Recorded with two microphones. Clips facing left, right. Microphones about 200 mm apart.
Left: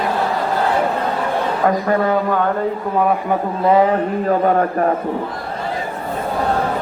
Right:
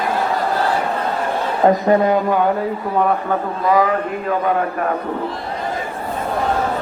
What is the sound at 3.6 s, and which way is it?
Speech, 30° left (ahead or behind).